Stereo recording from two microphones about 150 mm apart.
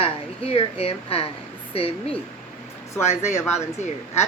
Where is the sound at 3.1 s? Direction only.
50° left (ahead or behind).